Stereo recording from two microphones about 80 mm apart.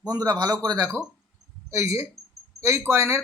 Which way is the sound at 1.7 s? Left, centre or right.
Right.